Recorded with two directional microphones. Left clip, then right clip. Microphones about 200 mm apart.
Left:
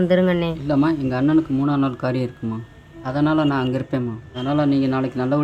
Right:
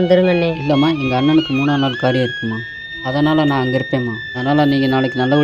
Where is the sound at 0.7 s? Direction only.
15° right (ahead or behind).